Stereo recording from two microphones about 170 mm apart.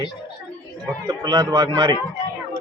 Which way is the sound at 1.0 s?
25° right (ahead or behind).